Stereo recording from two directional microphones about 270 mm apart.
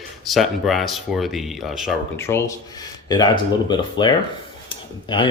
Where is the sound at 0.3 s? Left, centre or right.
Centre.